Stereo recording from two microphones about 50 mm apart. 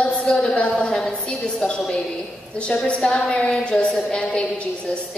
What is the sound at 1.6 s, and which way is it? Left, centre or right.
A woman's voice, centre.